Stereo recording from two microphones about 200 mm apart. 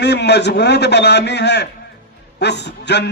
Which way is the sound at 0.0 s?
55° left (ahead or behind).